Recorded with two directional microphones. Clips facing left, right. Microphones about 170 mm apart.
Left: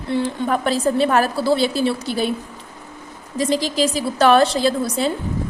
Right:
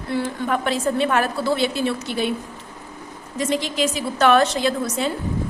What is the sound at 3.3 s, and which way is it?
A woman's voice, 35° left (ahead or behind).